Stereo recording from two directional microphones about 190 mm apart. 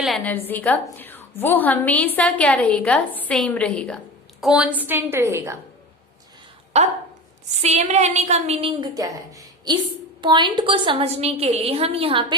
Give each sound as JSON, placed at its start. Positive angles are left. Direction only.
{"t": 0.0, "sound": "a woman's voice", "side_deg": 0}
{"t": 6.7, "sound": "a woman's voice", "side_deg": -35}